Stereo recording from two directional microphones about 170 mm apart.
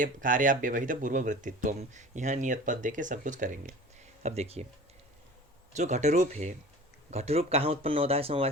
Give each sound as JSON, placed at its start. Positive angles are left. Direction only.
{"t": 0.0, "sound": "speech", "side_deg": -50}
{"t": 5.7, "sound": "speech", "side_deg": -45}